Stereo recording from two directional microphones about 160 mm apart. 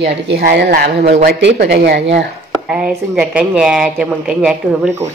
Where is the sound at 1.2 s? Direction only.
90° right.